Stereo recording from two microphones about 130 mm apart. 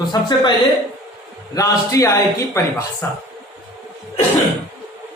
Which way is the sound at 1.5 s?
25° left (ahead or behind).